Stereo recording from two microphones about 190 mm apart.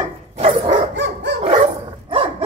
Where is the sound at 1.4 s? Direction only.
30° right (ahead or behind).